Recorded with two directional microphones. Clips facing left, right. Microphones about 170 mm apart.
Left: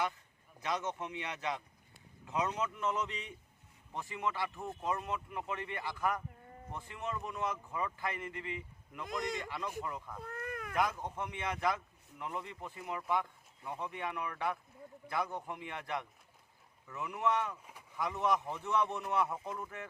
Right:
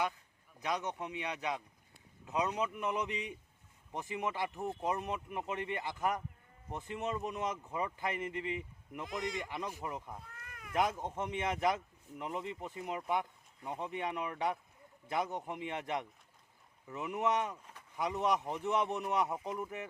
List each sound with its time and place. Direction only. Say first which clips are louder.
0.6 s speech: even; 15° right (ahead or behind)
10.2 s cat: left 12 dB; 55° left (ahead or behind)
10.8 s speech: right 2 dB; 20° right (ahead or behind)